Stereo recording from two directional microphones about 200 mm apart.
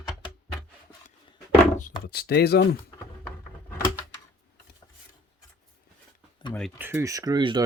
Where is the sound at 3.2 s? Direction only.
10° left (ahead or behind).